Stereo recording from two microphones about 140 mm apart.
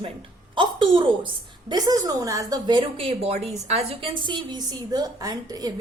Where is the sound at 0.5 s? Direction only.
35° right (ahead or behind).